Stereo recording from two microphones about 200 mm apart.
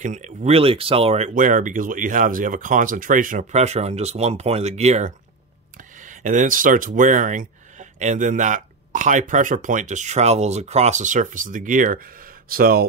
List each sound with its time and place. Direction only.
0.0 s speech: 35° right (ahead or behind)
5.8 s a sound: 40° right (ahead or behind)
7.0 s speech: 40° right (ahead or behind)